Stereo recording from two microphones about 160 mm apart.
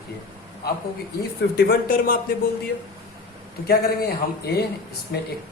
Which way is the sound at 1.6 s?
65° left (ahead or behind).